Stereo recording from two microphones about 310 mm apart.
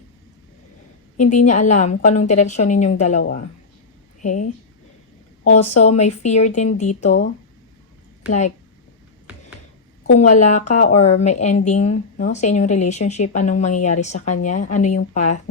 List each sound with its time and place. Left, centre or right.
1.2 s speech: left
4.2 s a woman's voice: left
5.5 s speech: left
8.3 s speech: left
10.2 s speech: left